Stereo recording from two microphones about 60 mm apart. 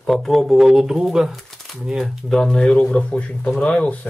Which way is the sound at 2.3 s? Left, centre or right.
Centre.